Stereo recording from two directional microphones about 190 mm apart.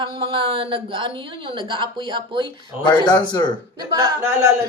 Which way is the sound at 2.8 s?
20° left (ahead or behind).